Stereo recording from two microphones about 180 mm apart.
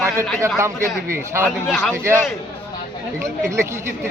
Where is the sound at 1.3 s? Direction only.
15° right (ahead or behind).